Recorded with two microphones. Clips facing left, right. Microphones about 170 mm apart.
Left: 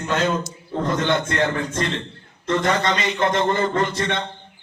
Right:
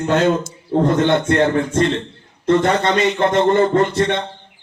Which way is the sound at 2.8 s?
55° right (ahead or behind).